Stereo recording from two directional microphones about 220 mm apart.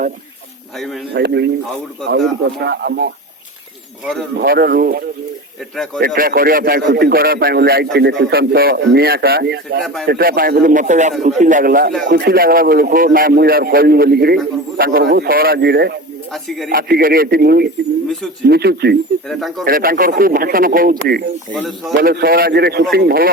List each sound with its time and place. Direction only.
1.1 s a man's voice: 50° right (ahead or behind)
2.6 s a man's voice: 50° right (ahead or behind)
4.0 s speech: centre (ahead or behind)
4.4 s a man's voice: 45° right (ahead or behind)
5.7 s speech: centre (ahead or behind)
6.1 s a man's voice: 40° right (ahead or behind)
9.8 s speech: centre (ahead or behind)
10.1 s a man's voice: 45° right (ahead or behind)
16.3 s speech: centre (ahead or behind)
16.6 s a man's voice: 40° right (ahead or behind)
19.3 s speech: centre (ahead or behind)
19.6 s speech: 40° right (ahead or behind)
21.5 s speech: centre (ahead or behind)
22.0 s a man's voice: 45° right (ahead or behind)